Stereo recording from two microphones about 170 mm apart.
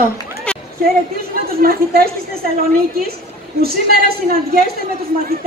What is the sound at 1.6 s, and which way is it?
Speech, 60° right (ahead or behind).